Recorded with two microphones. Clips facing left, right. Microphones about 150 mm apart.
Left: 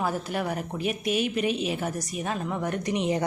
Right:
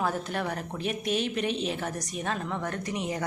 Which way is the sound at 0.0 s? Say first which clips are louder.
Left 1 dB; 5° left (ahead or behind).